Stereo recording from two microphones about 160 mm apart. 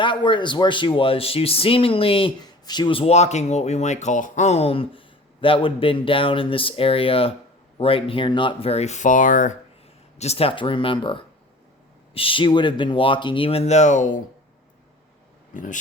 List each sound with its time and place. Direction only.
0.0 s speech: 30° left (ahead or behind); by 9.6 s 55° left (ahead or behind)
10.2 s speech: 40° left (ahead or behind)
15.5 s speech: 55° left (ahead or behind)